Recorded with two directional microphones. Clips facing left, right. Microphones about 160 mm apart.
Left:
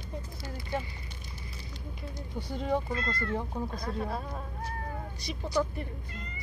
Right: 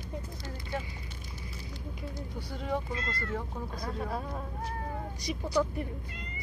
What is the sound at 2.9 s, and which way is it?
Speech, 20° right (ahead or behind).